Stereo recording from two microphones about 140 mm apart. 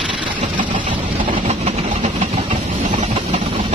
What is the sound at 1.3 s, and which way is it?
Vehicle, 60° right (ahead or behind).